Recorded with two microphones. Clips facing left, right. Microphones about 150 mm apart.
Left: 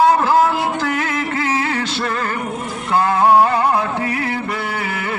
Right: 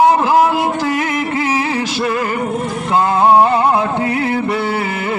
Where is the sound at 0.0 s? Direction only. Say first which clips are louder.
Right 2 dB; 20° right (ahead or behind).